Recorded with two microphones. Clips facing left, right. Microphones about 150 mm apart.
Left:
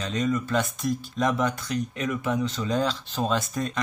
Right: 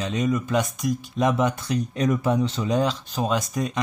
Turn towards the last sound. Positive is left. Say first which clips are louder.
# right 2 dB
turn(degrees=-10)  # may be behind; listen again after turning